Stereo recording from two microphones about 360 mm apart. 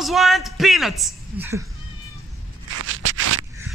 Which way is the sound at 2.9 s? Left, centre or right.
Right.